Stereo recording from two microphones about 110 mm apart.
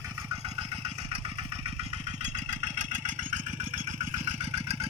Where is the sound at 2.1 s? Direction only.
85° right.